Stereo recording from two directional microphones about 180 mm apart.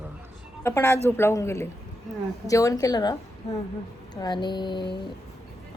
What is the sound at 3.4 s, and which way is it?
A woman's voice, 35° left (ahead or behind).